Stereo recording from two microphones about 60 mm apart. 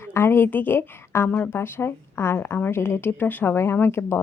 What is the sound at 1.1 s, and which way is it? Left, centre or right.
A woman's voice, left.